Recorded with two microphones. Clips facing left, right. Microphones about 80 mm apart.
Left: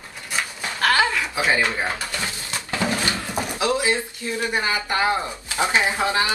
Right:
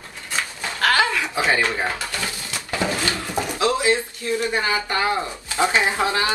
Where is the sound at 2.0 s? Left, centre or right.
Left.